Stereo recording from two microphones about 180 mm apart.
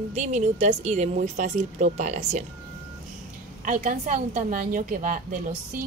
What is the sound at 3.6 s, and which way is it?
A woman's voice, 40° right (ahead or behind).